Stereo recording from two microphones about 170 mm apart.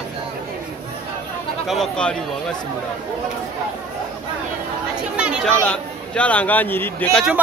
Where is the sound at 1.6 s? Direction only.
Centre (ahead or behind).